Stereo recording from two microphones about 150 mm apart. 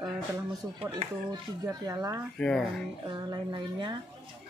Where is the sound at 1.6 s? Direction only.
20° right (ahead or behind).